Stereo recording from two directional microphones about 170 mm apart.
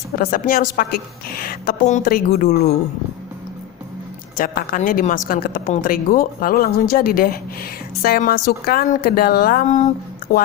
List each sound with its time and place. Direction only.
0.2 s a woman's voice: 55° left (ahead or behind)
1.8 s a woman's voice: 50° left (ahead or behind); by 2.7 s 65° left (ahead or behind)
4.4 s a woman's voice: 60° left (ahead or behind)